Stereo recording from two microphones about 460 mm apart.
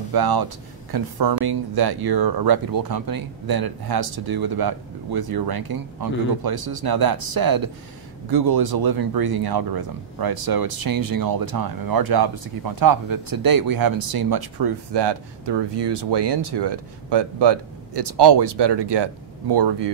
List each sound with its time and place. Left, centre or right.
0.1 s speech: right